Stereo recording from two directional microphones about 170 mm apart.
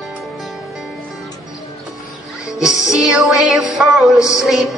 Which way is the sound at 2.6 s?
5° right (ahead or behind).